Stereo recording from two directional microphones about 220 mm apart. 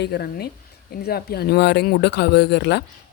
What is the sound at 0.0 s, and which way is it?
Speech, 45° left (ahead or behind).